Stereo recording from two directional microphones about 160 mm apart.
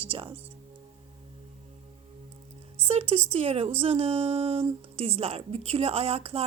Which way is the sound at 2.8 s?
40° right (ahead or behind).